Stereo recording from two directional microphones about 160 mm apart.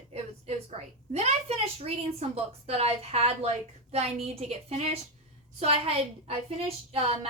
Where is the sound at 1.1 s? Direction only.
45° right (ahead or behind).